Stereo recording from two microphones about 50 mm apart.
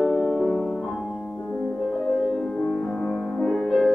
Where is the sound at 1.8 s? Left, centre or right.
Centre.